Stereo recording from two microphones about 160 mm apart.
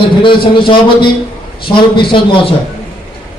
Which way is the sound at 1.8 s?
30° left (ahead or behind).